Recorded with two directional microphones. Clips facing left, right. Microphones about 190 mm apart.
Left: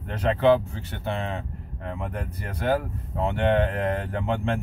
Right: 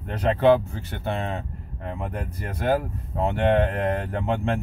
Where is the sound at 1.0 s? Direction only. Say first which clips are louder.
Right 1 dB; 40° right (ahead or behind).